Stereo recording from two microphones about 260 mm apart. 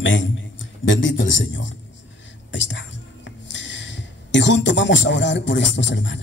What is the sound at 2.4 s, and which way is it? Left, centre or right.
Whispering, left.